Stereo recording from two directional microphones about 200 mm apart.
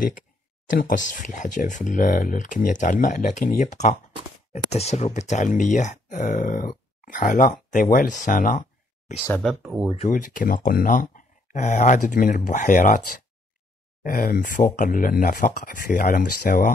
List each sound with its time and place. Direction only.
0.7 s speech: 40° left (ahead or behind)
8.2 s a sound: 40° left (ahead or behind)
9.3 s speech: centre (ahead or behind)
9.9 s speech: 40° left (ahead or behind)
14.0 s speech: 45° left (ahead or behind)